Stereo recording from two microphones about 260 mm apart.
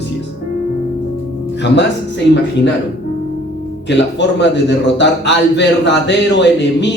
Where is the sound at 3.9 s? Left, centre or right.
Left.